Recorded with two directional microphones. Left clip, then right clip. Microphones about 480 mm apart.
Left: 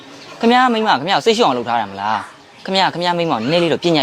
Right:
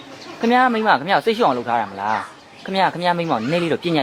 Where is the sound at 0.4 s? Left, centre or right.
Left.